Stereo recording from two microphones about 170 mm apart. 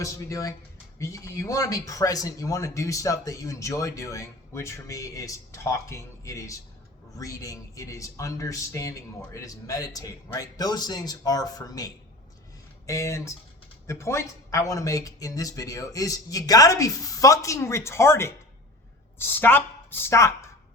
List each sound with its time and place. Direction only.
0.0 s speech: 20° left (ahead or behind)
12.9 s speech: 20° left (ahead or behind)